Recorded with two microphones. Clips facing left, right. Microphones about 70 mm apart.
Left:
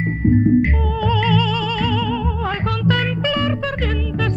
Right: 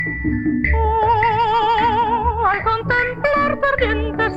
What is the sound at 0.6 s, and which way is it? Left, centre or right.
Music, right.